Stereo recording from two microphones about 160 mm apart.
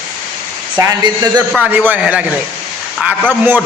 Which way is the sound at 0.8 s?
25° right (ahead or behind).